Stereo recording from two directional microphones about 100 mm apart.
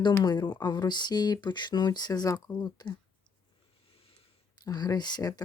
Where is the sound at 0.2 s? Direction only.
45° left (ahead or behind).